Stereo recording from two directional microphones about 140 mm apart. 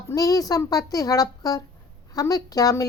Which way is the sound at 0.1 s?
25° left (ahead or behind).